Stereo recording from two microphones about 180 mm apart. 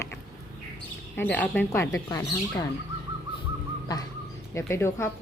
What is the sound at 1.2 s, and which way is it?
A woman's voice, 10° left (ahead or behind).